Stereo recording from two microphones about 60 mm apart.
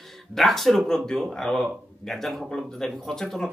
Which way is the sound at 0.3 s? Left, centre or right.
Centre.